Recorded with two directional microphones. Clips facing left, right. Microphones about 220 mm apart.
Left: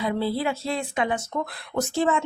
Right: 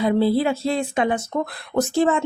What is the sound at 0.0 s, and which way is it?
Speech, 35° right (ahead or behind).